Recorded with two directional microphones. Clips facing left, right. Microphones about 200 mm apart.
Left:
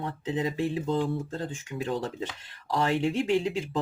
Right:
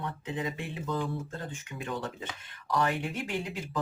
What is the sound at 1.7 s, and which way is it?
Speech, 30° left (ahead or behind).